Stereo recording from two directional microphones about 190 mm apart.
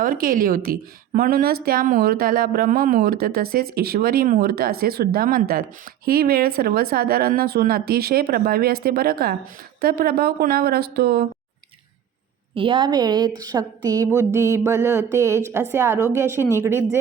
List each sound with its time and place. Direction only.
0.0 s a woman's voice: 50° right (ahead or behind)
12.5 s a woman's voice: 25° right (ahead or behind)